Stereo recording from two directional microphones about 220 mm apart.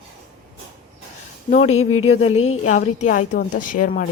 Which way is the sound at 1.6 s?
75° left (ahead or behind).